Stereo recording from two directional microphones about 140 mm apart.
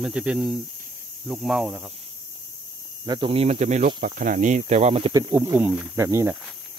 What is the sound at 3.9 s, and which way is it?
Speech, 90° right.